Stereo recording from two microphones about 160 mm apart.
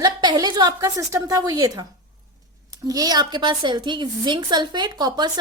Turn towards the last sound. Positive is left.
turn(degrees=-30)  # may be behind; listen again after turning